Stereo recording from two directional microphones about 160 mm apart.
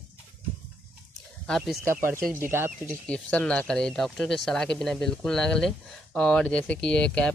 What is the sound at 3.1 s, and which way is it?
Speech, 5° left (ahead or behind).